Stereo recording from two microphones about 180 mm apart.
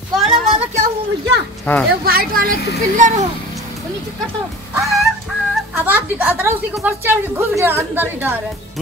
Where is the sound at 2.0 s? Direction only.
55° right (ahead or behind).